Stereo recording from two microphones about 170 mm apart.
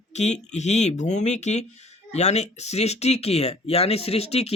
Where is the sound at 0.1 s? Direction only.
40° left (ahead or behind).